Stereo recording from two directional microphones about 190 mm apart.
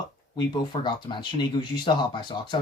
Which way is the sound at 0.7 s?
25° left (ahead or behind).